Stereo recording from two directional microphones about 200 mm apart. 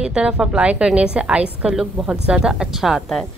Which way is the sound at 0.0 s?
5° right (ahead or behind).